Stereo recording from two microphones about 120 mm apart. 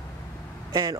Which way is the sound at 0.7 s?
35° right (ahead or behind).